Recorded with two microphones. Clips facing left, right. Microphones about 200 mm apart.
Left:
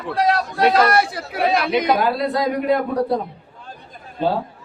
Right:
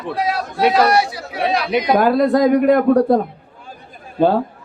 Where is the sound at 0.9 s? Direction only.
55° left (ahead or behind).